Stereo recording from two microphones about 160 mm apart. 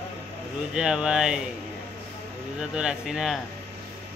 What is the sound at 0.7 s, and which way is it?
Speech, 5° right (ahead or behind).